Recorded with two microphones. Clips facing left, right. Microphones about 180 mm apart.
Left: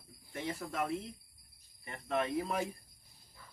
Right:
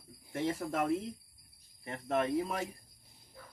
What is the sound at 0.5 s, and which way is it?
Speech, 30° right (ahead or behind).